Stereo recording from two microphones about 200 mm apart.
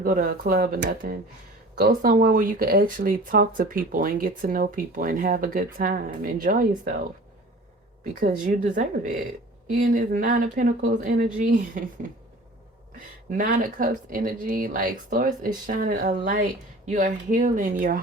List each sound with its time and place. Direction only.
0.0 s speech: 45° right (ahead or behind)
8.2 s speech: 40° right (ahead or behind)
13.3 s speech: 45° right (ahead or behind)